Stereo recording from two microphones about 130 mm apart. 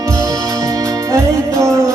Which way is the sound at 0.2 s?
25° right (ahead or behind).